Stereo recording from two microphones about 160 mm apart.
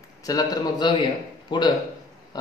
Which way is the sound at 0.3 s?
25° left (ahead or behind).